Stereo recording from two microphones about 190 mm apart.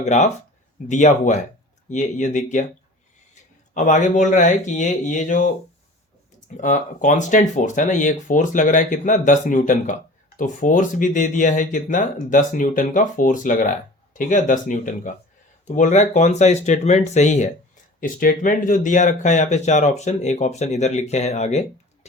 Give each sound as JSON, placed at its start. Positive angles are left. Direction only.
{"t": 0.0, "sound": "speech", "side_deg": 35}
{"t": 6.6, "sound": "speech", "side_deg": 40}